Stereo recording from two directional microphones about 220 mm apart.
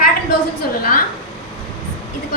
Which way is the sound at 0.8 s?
40° left (ahead or behind).